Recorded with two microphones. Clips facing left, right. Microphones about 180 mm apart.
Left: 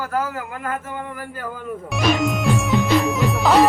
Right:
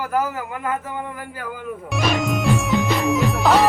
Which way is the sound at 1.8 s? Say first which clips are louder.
Left 2 dB; centre (ahead or behind).